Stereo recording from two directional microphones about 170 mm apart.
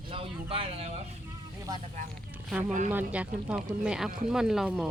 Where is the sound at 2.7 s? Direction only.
45° right (ahead or behind).